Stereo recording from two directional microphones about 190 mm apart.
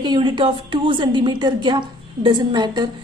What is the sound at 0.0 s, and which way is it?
A woman's voice, 25° right (ahead or behind).